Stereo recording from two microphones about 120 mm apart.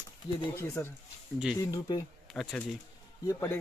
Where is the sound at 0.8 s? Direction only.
25° left (ahead or behind).